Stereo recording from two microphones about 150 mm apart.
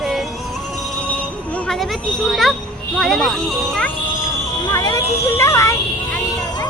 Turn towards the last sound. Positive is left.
turn(degrees=20)  # may be behind; listen again after turning